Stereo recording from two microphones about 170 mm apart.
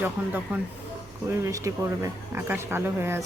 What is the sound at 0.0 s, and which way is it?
A woman's voice, 10° right (ahead or behind).